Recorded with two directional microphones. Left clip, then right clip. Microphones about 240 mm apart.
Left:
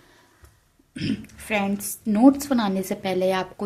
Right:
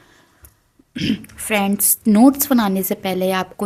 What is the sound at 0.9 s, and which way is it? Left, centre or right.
A woman's voice, right.